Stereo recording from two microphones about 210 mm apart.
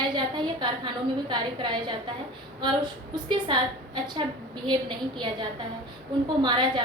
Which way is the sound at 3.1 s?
20° right (ahead or behind).